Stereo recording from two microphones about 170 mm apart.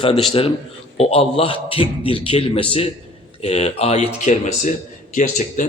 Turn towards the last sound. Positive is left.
turn(degrees=45)  # may be behind; listen again after turning